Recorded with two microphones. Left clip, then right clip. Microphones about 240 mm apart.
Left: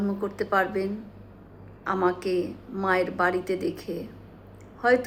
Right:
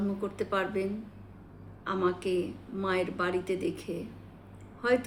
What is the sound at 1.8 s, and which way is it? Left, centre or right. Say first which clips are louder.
A woman's voice: left 5 dB; centre.